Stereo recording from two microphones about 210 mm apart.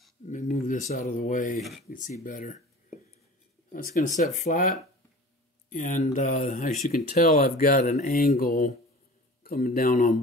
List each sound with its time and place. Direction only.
0.3 s speech: 35° left (ahead or behind)
3.7 s speech: 35° left (ahead or behind)